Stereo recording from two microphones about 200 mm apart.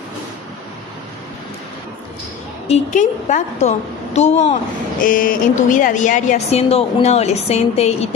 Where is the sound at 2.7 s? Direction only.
35° left (ahead or behind).